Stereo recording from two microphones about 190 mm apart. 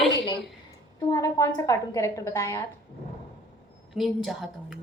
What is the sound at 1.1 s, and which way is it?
A woman's voice, 15° left (ahead or behind).